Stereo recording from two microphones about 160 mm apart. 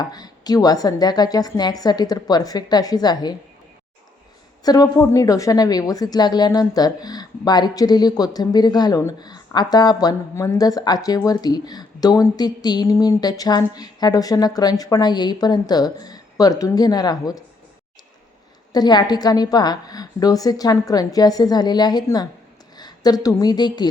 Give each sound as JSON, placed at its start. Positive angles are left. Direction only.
{"t": 0.0, "sound": "a woman's voice", "side_deg": 25}
{"t": 4.6, "sound": "a woman's voice", "side_deg": 25}
{"t": 18.7, "sound": "a woman's voice", "side_deg": 25}